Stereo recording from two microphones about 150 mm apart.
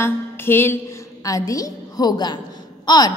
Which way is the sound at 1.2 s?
20° left (ahead or behind).